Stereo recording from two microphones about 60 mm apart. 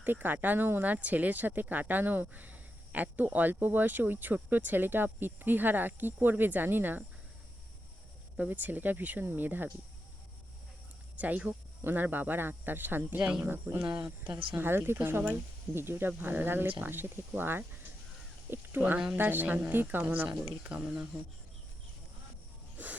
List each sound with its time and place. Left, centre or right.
0.0 s speech: right
8.4 s speech: right
11.2 s speech: right
13.8 s speech: centre
14.5 s speech: right
20.4 s speech: centre